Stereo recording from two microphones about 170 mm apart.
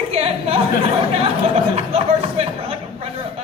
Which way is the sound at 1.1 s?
35° right (ahead or behind).